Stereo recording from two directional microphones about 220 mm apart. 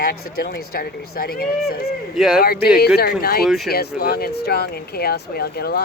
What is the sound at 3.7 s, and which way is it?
Speech, 45° left (ahead or behind).